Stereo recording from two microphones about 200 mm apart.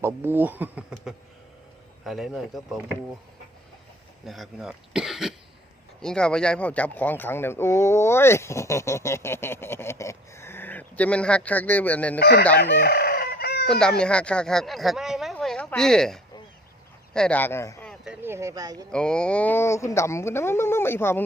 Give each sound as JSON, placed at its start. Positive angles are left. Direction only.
{"t": 0.0, "sound": "speech", "side_deg": -10}
{"t": 4.3, "sound": "speech", "side_deg": 0}
{"t": 12.2, "sound": "chicken", "side_deg": 50}
{"t": 13.7, "sound": "speech", "side_deg": 5}
{"t": 18.0, "sound": "speech", "side_deg": -5}
{"t": 18.9, "sound": "speech", "side_deg": 5}